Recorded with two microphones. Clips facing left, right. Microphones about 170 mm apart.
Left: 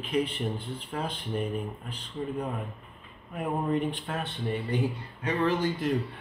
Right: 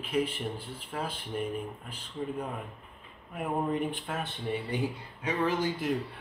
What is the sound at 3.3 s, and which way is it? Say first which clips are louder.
Speech: left 2 dB; 5° right (ahead or behind).